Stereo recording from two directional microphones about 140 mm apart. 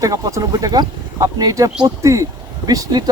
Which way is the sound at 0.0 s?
25° right (ahead or behind).